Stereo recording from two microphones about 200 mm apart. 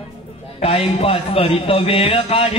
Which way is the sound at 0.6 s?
30° left (ahead or behind).